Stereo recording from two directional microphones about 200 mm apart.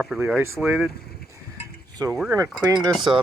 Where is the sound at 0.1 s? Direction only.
Centre (ahead or behind).